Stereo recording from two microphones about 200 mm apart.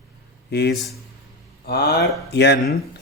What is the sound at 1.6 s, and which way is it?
Speech, 50° left (ahead or behind).